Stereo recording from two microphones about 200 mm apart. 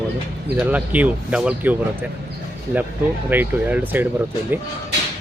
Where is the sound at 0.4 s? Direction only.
10° right (ahead or behind).